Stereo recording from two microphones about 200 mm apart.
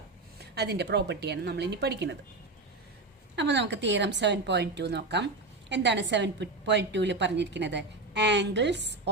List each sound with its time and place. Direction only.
0.3 s speech: 55° right (ahead or behind)
3.3 s speech: 60° right (ahead or behind)